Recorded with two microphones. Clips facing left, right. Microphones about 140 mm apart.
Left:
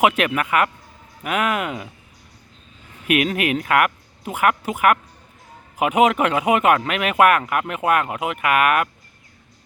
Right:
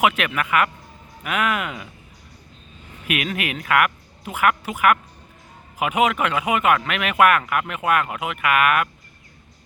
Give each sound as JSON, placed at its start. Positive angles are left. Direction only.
{"t": 0.3, "sound": "speech", "side_deg": 35}
{"t": 3.1, "sound": "speech", "side_deg": 40}